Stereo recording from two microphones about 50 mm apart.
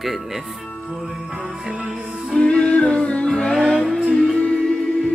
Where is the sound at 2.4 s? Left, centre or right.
Left.